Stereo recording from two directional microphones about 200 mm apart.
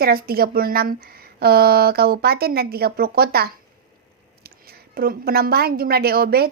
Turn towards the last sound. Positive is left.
turn(degrees=-50)  # may be behind; listen again after turning